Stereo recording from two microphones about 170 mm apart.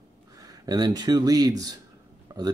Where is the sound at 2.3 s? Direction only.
20° right (ahead or behind).